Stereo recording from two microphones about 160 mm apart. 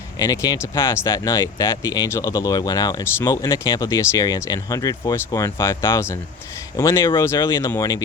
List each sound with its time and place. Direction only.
0.2 s speech: 20° left (ahead or behind)